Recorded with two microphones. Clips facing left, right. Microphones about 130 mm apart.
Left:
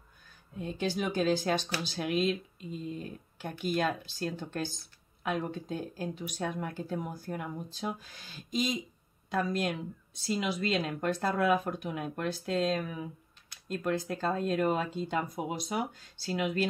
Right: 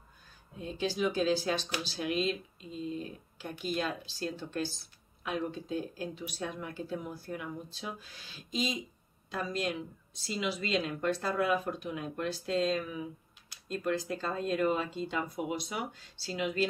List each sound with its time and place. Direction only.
0.6 s speech: 50° left (ahead or behind)